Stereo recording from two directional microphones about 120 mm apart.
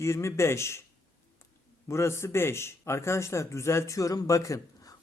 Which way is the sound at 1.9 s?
25° left (ahead or behind).